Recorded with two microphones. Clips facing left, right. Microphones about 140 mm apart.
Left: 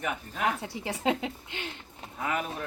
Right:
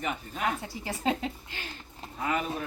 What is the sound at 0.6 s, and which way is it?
A woman's voice, 20° left (ahead or behind).